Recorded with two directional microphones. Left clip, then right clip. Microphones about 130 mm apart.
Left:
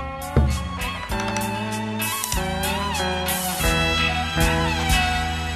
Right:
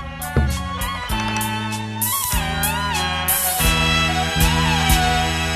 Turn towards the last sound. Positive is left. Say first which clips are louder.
# right 3 dB
turn(degrees=0)  # may be behind; listen again after turning